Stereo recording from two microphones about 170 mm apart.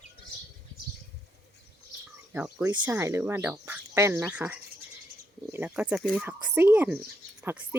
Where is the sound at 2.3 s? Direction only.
10° right (ahead or behind).